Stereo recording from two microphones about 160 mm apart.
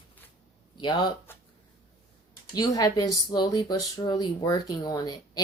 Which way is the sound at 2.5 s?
25° left (ahead or behind).